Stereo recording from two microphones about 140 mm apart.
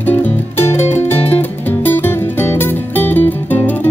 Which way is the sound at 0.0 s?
15° left (ahead or behind).